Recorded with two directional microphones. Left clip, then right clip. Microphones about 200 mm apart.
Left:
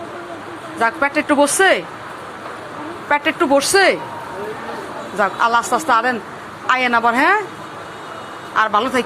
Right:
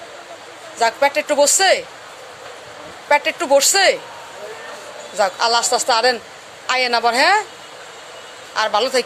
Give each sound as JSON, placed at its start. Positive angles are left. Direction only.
{"t": 0.8, "sound": "speech", "side_deg": -35}
{"t": 3.1, "sound": "speech", "side_deg": -45}
{"t": 5.1, "sound": "speech", "side_deg": -40}
{"t": 8.5, "sound": "speech", "side_deg": -40}